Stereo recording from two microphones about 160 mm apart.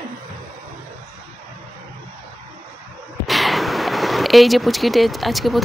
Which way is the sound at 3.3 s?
Centre (ahead or behind).